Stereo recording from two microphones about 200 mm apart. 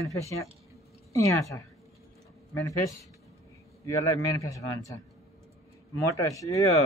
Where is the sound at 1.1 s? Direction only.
15° left (ahead or behind).